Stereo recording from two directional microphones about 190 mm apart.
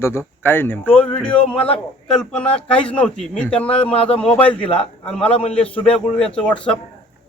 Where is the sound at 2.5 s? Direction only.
25° left (ahead or behind).